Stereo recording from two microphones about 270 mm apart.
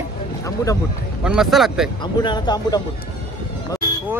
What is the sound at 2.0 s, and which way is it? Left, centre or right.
Speech, centre.